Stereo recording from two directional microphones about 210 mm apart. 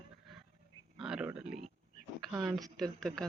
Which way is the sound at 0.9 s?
5° right (ahead or behind).